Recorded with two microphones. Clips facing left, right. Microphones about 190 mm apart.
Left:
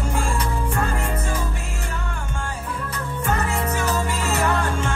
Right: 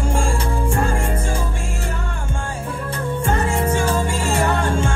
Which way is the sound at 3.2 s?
30° right (ahead or behind).